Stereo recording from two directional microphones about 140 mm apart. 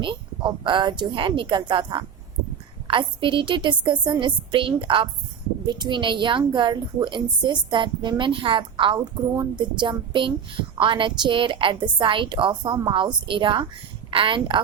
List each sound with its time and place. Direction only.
0.0 s a woman's voice: 35° right (ahead or behind)